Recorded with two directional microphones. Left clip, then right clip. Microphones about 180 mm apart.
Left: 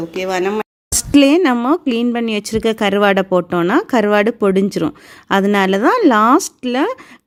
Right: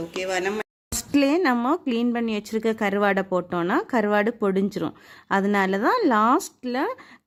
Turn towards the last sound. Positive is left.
turn(degrees=25)  # may be behind; listen again after turning